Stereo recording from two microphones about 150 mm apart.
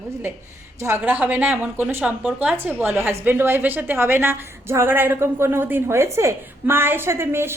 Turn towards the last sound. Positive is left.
turn(degrees=-15)  # may be behind; listen again after turning